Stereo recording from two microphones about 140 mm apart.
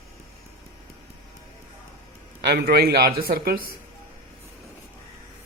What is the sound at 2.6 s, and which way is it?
Speech, 90° right.